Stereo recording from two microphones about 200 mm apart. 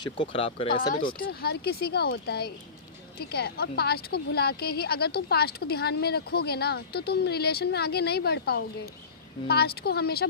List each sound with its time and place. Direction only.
0.0 s speech: 25° left (ahead or behind)
0.9 s speech: 45° left (ahead or behind)